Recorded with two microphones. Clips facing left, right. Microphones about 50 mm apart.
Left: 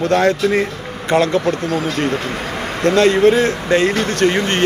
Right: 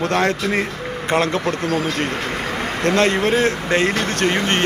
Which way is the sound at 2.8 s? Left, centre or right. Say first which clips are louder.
Left 6 dB; right.